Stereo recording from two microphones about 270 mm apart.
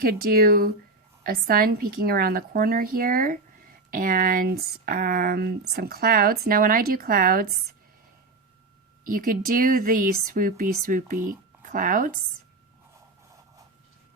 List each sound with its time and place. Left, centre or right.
0.0 s speech: right
9.0 s speech: right